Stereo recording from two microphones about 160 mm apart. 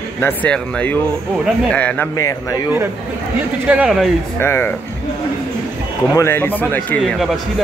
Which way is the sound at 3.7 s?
5° right (ahead or behind).